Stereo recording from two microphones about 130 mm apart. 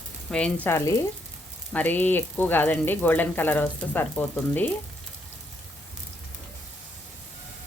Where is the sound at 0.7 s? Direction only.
25° left (ahead or behind).